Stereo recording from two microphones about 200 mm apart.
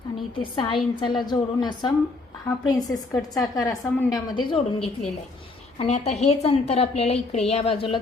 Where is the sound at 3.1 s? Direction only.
Centre (ahead or behind).